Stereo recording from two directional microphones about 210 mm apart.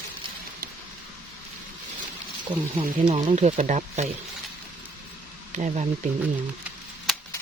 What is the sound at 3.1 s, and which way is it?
Speech, 30° right (ahead or behind).